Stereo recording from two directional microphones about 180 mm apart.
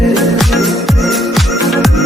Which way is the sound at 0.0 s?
Centre (ahead or behind).